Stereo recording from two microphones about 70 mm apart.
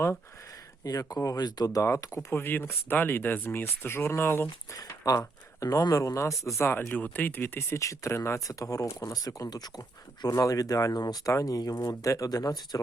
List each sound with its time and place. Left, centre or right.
1.1 s speech: left
2.3 s speech: left
4.7 s speech: left
7.8 s speech: left
10.3 s speech: left
11.3 s speech: left